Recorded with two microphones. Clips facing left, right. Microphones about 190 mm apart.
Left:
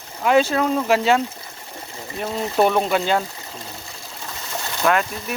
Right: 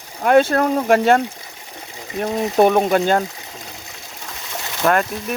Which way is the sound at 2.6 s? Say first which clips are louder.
Right 4 dB; 45° right (ahead or behind).